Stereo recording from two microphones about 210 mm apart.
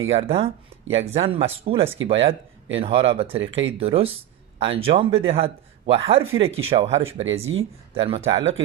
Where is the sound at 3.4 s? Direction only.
65° right (ahead or behind).